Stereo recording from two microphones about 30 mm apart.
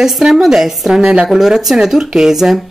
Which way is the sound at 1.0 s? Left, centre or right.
Right.